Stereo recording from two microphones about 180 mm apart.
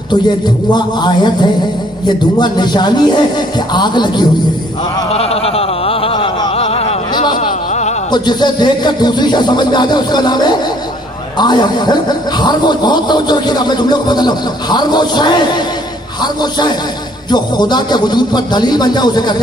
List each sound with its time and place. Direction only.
0.7 s a man's voice: 25° left (ahead or behind)
5.1 s bleat: 35° left (ahead or behind)
7.3 s a sound: 40° left (ahead or behind)
8.1 s a man's voice: 25° left (ahead or behind)